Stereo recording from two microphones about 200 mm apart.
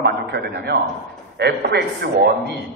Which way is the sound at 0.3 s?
55° right (ahead or behind).